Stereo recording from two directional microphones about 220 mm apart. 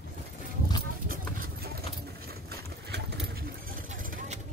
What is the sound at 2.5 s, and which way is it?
Vehicle, 45° right (ahead or behind).